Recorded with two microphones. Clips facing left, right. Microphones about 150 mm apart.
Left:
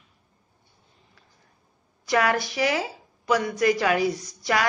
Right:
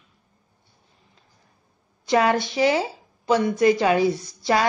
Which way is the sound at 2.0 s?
25° right (ahead or behind).